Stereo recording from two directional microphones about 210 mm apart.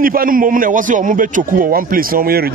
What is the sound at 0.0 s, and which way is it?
A man's voice, 45° right (ahead or behind).